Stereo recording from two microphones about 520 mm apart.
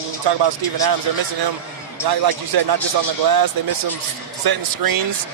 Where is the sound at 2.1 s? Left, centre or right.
Right.